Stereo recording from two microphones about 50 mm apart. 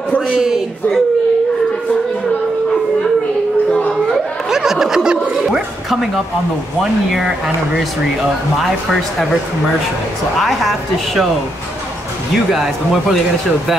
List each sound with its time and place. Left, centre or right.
0.3 s a man's voice: centre
4.5 s snicker: centre
5.9 s speech: centre
7.2 s a man's voice: centre
10.4 s speech: centre